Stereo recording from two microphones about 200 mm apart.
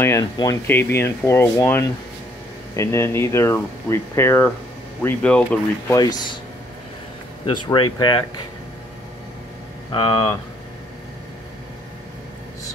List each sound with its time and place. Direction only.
0.0 s speech: 15° left (ahead or behind)
5.9 s speech: 20° left (ahead or behind)
7.4 s speech: 25° left (ahead or behind)
9.9 s speech: 25° left (ahead or behind)